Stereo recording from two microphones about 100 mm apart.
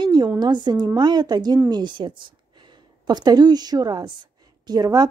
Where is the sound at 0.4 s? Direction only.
50° right (ahead or behind).